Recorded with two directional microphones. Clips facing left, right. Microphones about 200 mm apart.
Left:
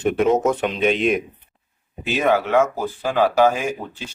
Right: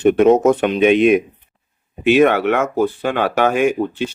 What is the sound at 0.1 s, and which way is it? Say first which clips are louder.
Speech: right 6 dB; 60° right (ahead or behind).